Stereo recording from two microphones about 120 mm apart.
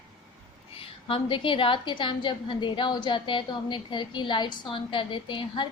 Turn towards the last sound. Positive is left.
turn(degrees=40)  # may be behind; listen again after turning